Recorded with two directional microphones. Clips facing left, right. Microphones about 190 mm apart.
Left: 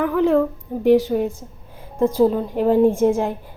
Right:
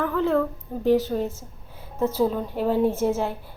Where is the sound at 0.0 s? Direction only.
15° left (ahead or behind).